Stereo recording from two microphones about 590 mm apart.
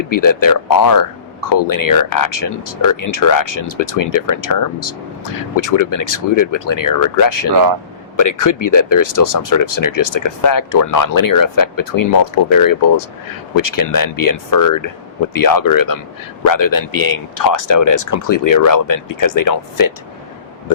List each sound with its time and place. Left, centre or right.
0.1 s speech: left